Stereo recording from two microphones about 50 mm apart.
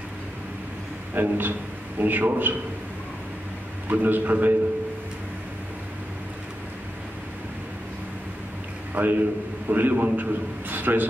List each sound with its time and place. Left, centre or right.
1.1 s a man's voice: right
3.9 s a man's voice: right
9.0 s a man's voice: right
10.3 s a man's voice: right